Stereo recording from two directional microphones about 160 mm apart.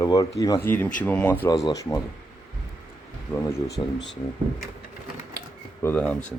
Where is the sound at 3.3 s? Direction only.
15° left (ahead or behind).